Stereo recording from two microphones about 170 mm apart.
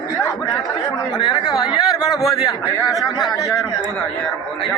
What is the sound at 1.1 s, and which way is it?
Speech, 25° left (ahead or behind).